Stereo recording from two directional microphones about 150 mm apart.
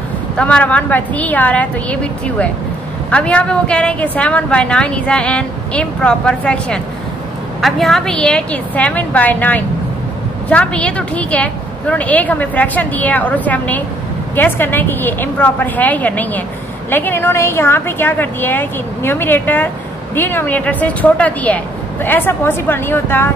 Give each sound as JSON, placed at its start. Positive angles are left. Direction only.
{"t": 0.4, "sound": "a woman's voice", "side_deg": 5}